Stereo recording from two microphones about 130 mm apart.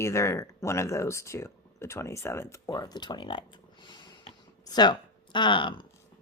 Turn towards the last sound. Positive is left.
turn(degrees=40)  # may be behind; listen again after turning